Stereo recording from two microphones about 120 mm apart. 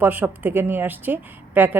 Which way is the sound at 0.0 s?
15° right (ahead or behind).